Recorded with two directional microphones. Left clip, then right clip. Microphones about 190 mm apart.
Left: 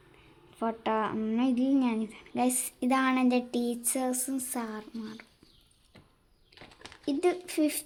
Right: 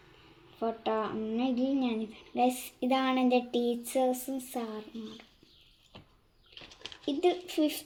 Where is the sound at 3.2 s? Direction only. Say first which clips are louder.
Right 1 dB; 60° left (ahead or behind).